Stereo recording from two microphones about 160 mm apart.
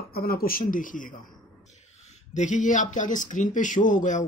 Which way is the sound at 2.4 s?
50° left (ahead or behind).